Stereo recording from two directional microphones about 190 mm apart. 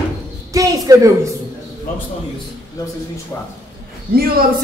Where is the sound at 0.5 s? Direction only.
20° right (ahead or behind).